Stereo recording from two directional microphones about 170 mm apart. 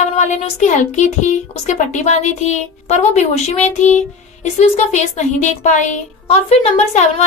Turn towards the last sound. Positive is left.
turn(degrees=40)  # may be behind; listen again after turning